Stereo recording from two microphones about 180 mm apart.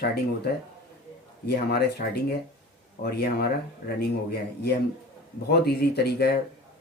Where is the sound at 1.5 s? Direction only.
60° left (ahead or behind).